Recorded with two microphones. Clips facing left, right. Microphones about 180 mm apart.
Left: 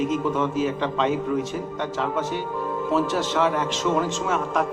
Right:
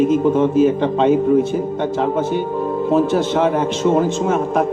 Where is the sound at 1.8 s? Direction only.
35° right (ahead or behind).